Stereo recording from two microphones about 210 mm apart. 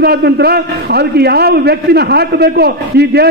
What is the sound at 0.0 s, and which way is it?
A man's voice, 50° right (ahead or behind).